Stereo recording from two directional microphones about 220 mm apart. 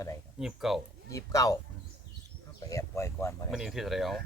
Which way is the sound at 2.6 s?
15° left (ahead or behind).